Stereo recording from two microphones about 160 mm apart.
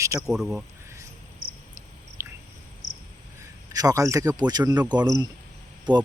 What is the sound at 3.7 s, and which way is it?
Speech, 20° right (ahead or behind).